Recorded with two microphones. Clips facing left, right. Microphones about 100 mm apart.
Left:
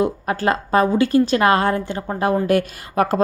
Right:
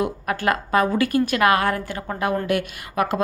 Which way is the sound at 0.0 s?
30° left (ahead or behind).